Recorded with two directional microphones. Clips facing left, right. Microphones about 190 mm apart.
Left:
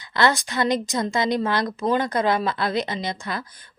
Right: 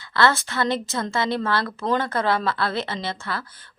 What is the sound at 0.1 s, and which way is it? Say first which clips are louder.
A woman's voice: even; 15° left (ahead or behind).